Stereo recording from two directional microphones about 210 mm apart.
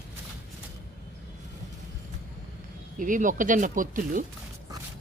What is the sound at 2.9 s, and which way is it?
Speech, 40° right (ahead or behind).